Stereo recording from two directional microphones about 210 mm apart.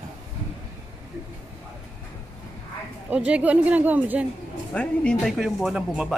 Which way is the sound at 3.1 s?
5° right (ahead or behind).